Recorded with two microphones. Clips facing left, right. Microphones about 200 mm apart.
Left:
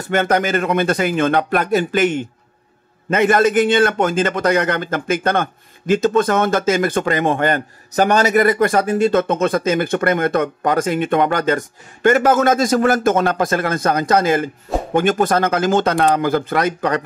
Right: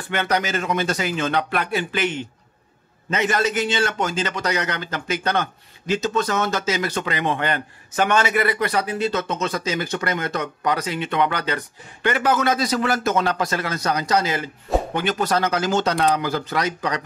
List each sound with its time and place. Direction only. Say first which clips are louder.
0.0 s a man's voice: left 6 dB; 45° left (ahead or behind)